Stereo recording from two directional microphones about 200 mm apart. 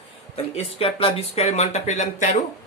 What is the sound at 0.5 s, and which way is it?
Speech, 30° left (ahead or behind).